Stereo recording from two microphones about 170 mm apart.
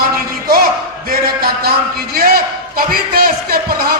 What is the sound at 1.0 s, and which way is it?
A man's voice, 60° right (ahead or behind).